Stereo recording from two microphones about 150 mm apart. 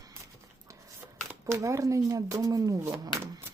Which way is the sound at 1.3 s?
20° right (ahead or behind).